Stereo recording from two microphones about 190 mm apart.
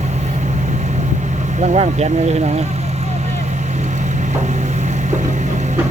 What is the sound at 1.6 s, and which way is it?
Speech, 35° right (ahead or behind).